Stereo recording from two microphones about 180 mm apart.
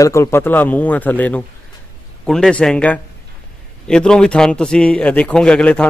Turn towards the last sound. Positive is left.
turn(degrees=5)  # may be behind; listen again after turning